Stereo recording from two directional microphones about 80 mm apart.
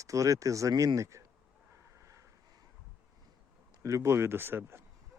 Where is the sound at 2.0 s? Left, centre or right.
Right.